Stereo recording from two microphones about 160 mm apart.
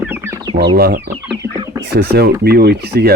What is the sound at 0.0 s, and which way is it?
Chicken, 10° right (ahead or behind).